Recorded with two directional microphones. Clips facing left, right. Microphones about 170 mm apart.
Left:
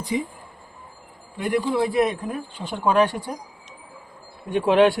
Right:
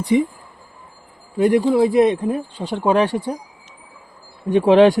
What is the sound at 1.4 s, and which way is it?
Speech, 35° right (ahead or behind).